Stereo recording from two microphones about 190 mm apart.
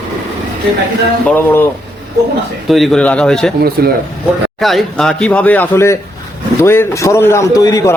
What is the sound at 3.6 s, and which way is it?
Speech, 55° right (ahead or behind).